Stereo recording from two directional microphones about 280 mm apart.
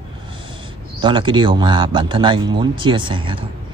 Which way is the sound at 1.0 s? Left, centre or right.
Centre.